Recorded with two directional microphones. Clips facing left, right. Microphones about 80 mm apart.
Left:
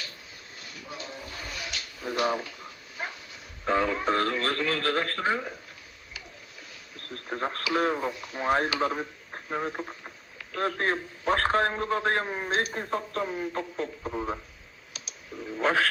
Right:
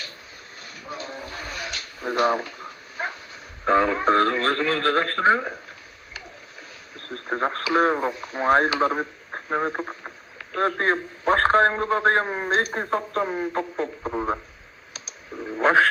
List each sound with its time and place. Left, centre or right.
0.6 s a sound: right
3.7 s speech: right
6.9 s speech: right
14.9 s clicking: right